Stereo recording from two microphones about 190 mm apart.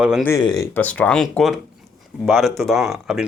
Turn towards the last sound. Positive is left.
turn(degrees=-5)  # may be behind; listen again after turning